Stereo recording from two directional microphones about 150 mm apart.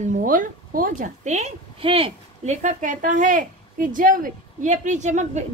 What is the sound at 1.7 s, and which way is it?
Speech, 40° right (ahead or behind).